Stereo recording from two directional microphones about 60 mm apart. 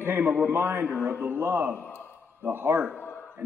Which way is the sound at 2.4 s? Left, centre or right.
Right.